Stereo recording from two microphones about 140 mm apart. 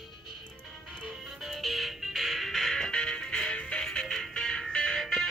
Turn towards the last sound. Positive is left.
turn(degrees=0)  # may be behind; listen again after turning